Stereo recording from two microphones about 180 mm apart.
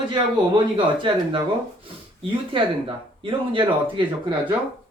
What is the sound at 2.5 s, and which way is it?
Speech, 30° right (ahead or behind).